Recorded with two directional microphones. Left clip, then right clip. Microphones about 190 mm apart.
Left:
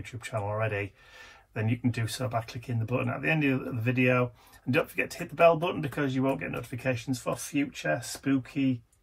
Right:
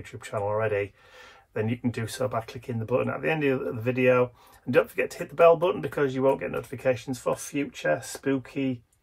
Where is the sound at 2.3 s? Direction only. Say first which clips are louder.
Right 2 dB; 15° right (ahead or behind).